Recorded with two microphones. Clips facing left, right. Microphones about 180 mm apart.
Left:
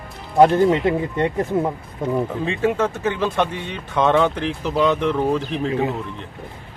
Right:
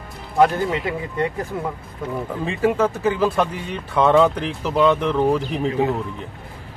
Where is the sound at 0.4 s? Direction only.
25° left (ahead or behind).